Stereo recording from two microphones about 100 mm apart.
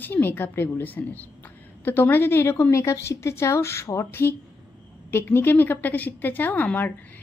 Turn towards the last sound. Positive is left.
turn(degrees=20)  # may be behind; listen again after turning